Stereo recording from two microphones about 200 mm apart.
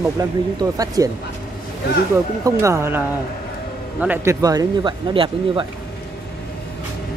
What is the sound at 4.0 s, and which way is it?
Speech, 10° right (ahead or behind).